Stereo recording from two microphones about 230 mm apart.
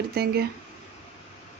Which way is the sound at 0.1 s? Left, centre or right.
Right.